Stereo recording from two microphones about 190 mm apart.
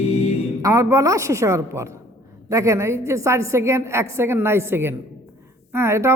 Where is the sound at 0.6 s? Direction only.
15° right (ahead or behind).